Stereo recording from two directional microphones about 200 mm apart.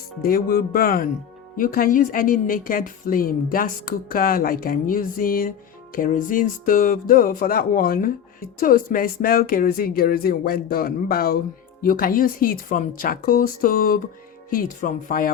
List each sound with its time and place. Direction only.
0.2 s speech: 45° left (ahead or behind)